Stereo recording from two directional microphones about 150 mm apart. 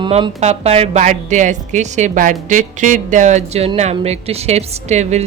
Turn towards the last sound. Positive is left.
turn(degrees=-50)  # may be behind; listen again after turning